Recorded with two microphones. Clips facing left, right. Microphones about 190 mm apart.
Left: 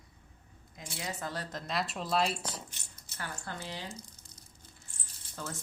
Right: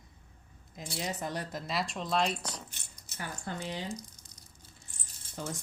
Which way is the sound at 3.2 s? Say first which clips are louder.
Right 3 dB; 15° right (ahead or behind).